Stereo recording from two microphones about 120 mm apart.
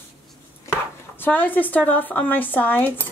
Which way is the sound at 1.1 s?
15° left (ahead or behind).